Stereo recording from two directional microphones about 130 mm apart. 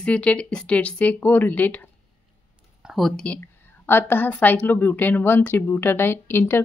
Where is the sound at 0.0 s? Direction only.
10° left (ahead or behind).